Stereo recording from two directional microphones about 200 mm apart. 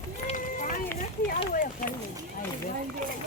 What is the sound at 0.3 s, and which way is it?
Run, 40° left (ahead or behind).